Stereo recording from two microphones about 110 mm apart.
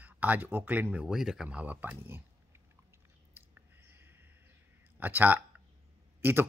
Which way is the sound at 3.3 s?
20° right (ahead or behind).